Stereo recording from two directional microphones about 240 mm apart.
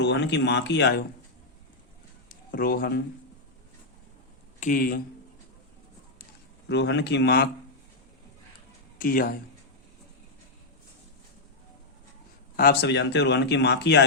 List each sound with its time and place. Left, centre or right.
0.0 s speech: left
2.3 s speech: left
4.6 s speech: left
6.7 s speech: left
9.0 s speech: left
12.5 s speech: left